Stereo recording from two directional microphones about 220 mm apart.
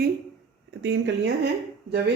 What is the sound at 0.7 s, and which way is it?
Speech, 55° right (ahead or behind).